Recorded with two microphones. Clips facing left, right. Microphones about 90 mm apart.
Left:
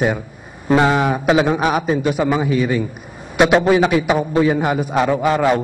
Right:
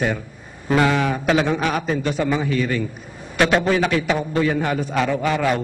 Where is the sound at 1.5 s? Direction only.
15° left (ahead or behind).